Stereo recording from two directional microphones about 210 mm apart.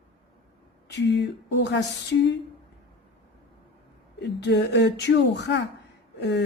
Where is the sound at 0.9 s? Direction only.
55° left (ahead or behind).